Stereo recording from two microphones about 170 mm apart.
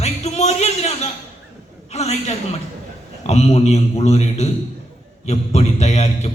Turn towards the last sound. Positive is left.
turn(degrees=40)  # may be behind; listen again after turning